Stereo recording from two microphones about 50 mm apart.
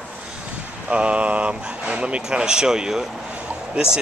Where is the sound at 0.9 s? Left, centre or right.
Right.